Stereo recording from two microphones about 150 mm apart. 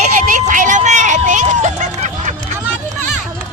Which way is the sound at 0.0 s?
55° right (ahead or behind).